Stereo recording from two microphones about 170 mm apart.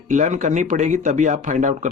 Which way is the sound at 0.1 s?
45° right (ahead or behind).